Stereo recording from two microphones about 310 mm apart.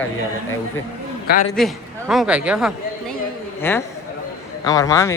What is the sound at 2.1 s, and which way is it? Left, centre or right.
Speech, centre.